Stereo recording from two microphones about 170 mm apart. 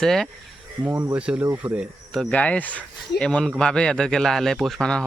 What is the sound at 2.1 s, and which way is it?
Speech, 5° left (ahead or behind).